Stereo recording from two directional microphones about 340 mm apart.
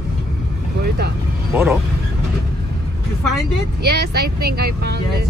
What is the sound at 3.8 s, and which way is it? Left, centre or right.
Speech, right.